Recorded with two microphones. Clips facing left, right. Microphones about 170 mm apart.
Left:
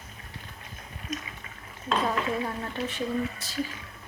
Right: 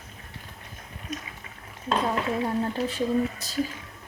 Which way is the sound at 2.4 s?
40° right (ahead or behind).